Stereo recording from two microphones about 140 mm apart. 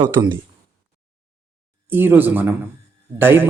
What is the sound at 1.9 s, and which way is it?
Speech, 15° right (ahead or behind).